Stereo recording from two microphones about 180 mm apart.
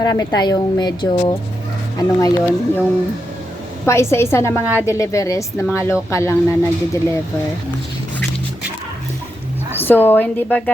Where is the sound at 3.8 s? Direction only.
15° left (ahead or behind).